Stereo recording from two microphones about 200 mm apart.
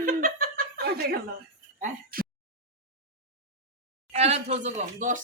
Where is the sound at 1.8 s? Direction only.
45° right (ahead or behind).